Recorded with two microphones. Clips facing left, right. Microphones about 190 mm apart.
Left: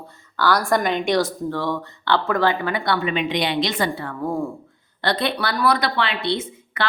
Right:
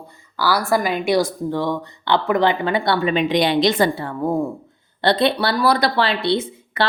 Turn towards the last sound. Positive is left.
turn(degrees=-30)  # may be behind; listen again after turning